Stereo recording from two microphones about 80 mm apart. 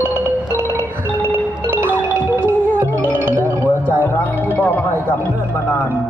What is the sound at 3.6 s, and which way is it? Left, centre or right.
Music, left.